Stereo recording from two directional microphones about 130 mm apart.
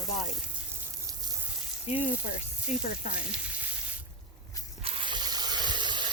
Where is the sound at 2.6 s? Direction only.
65° left (ahead or behind).